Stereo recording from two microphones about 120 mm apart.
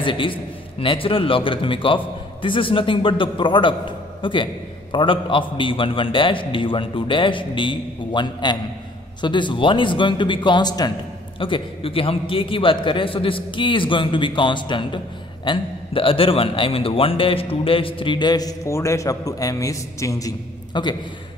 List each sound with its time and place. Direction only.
0.0 s a man's voice: 45° left (ahead or behind)
11.3 s a man's voice: 45° left (ahead or behind)